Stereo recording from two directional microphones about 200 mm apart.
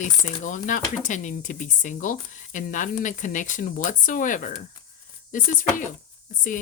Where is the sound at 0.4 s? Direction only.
40° left (ahead or behind).